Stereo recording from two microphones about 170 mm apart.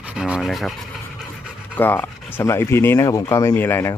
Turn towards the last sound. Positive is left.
turn(degrees=15)  # may be behind; listen again after turning